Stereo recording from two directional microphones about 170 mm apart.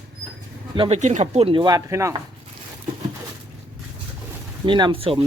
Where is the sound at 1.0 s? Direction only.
45° right (ahead or behind); by 2.2 s 20° right (ahead or behind).